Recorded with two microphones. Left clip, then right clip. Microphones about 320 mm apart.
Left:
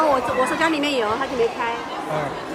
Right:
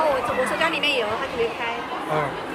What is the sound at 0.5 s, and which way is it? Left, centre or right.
Speech, left.